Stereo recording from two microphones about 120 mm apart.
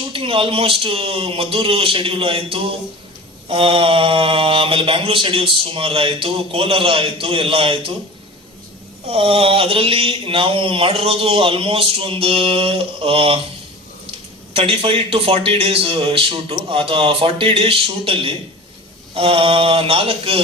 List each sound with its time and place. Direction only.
0.1 s speech: 50° right (ahead or behind)
9.0 s speech: 50° right (ahead or behind)
14.5 s speech: 50° right (ahead or behind)